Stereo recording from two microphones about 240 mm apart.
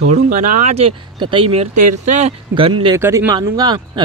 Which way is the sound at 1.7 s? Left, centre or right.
Right.